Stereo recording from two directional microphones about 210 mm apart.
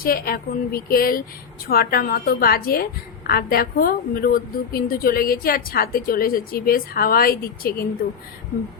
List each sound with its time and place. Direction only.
0.0 s a woman's voice: 45° left (ahead or behind)